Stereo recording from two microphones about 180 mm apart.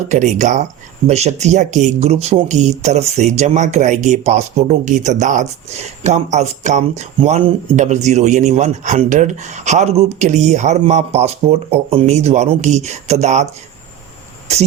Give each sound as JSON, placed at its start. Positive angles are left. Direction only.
{"t": 0.1, "sound": "speech", "side_deg": -40}